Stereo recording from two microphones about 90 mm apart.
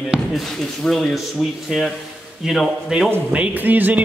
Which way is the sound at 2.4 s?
5° right (ahead or behind).